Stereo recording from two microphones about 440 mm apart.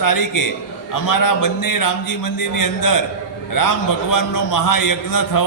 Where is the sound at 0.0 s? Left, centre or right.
Left.